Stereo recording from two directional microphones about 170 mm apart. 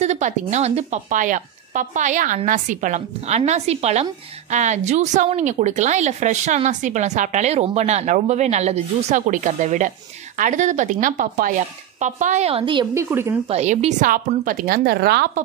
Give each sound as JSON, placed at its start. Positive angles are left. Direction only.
{"t": 0.0, "sound": "a woman's voice", "side_deg": -45}
{"t": 12.9, "sound": "a woman's voice", "side_deg": -15}
{"t": 13.5, "sound": "a woman's voice", "side_deg": -40}